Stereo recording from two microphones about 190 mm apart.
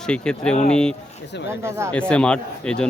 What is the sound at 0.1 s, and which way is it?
Speech, 5° left (ahead or behind).